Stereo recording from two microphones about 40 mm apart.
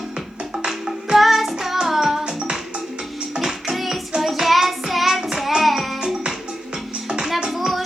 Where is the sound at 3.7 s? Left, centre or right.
Centre.